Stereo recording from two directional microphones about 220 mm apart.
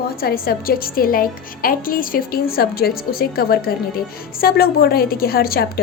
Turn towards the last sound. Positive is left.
turn(degrees=45)  # may be behind; listen again after turning